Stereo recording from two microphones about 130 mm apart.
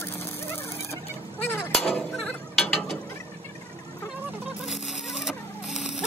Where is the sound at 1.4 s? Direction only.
20° left (ahead or behind).